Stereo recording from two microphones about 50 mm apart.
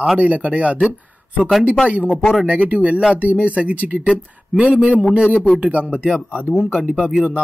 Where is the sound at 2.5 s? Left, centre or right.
Right.